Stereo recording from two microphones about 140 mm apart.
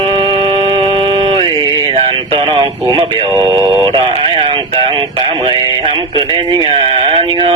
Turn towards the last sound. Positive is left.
turn(degrees=-40)  # may be behind; listen again after turning